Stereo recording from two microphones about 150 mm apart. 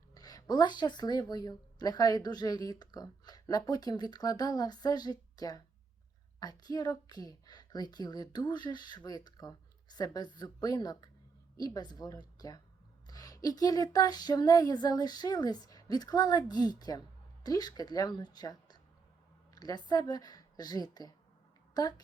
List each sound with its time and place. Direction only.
0.1 s a woman's voice: 25° left (ahead or behind)